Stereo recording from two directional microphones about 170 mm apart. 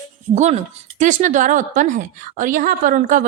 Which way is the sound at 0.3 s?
40° right (ahead or behind).